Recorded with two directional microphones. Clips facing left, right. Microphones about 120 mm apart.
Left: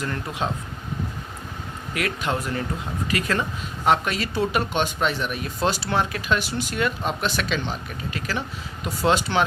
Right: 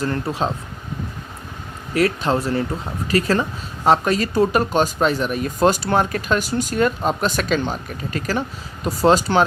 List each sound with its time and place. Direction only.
0.0 s speech: 35° right (ahead or behind)
1.9 s speech: 35° right (ahead or behind)